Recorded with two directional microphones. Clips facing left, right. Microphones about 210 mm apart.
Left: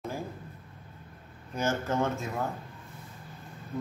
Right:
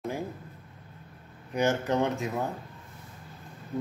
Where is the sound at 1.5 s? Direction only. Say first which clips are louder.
Right 4 dB; 15° right (ahead or behind).